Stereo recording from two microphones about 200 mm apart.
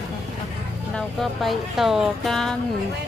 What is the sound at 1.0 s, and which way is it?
Speech, centre (ahead or behind).